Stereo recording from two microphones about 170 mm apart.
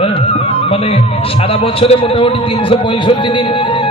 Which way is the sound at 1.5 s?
35° left (ahead or behind).